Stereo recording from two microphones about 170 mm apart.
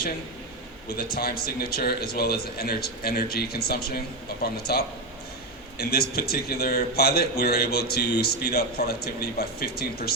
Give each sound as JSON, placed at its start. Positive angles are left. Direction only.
{"t": 0.9, "sound": "a man's voice", "side_deg": 65}